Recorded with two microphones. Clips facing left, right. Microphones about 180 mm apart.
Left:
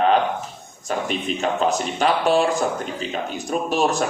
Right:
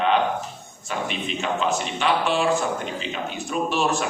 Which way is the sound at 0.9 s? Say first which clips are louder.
Left 4 dB; 40° left (ahead or behind).